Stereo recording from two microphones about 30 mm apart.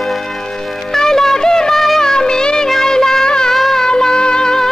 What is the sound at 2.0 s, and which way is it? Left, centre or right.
Music of bollywood, left.